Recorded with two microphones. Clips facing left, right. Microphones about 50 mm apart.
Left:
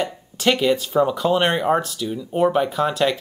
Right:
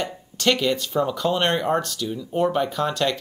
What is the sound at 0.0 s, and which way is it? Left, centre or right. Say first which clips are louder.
Speech: left 2 dB; centre.